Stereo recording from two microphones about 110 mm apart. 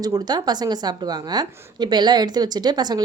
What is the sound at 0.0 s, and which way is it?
A woman's voice, 35° right (ahead or behind).